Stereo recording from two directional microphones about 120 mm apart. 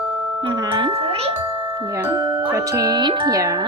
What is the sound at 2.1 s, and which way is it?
Music, 30° right (ahead or behind).